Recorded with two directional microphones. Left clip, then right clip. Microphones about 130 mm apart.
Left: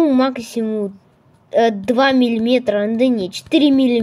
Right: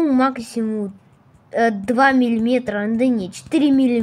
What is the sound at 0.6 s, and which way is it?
Speech, 35° left (ahead or behind).